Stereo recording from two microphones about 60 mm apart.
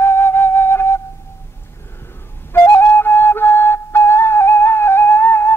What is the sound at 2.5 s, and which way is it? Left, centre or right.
Flute, left.